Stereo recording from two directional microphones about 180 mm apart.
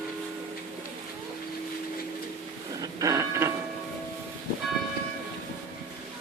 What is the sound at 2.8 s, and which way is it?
Train, 20° right (ahead or behind).